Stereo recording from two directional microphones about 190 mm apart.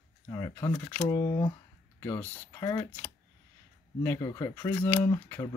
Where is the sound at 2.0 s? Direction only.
10° left (ahead or behind).